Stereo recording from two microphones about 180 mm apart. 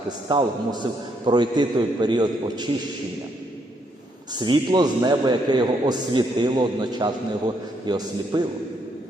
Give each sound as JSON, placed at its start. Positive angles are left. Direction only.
{"t": 0.3, "sound": "a man's voice", "side_deg": -25}
{"t": 4.4, "sound": "a man's voice", "side_deg": -25}